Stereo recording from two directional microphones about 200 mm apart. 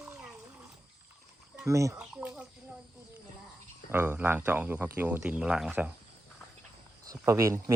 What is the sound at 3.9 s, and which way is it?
Speech, 10° right (ahead or behind).